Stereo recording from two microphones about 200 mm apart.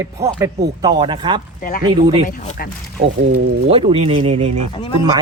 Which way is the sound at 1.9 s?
25° right (ahead or behind).